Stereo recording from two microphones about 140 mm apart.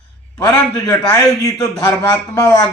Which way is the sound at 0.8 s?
25° left (ahead or behind).